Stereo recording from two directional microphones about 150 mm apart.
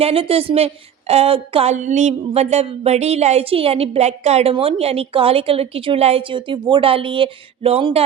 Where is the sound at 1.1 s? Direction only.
40° right (ahead or behind).